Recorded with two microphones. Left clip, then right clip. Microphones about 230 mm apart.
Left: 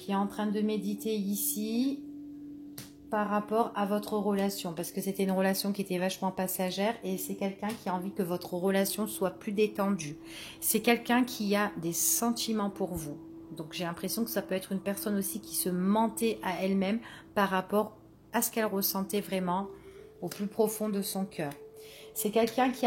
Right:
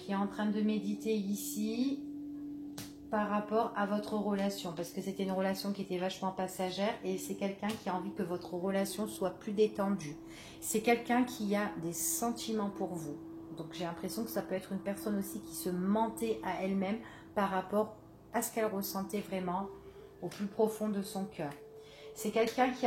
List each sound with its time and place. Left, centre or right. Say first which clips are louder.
0.0 s speech: left 4 dB; left
3.1 s speech: left 3 dB; left
20.5 s speech: left 3 dB; left